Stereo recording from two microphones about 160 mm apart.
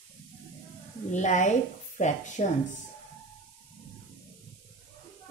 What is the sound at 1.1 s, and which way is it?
Speech, 50° left (ahead or behind).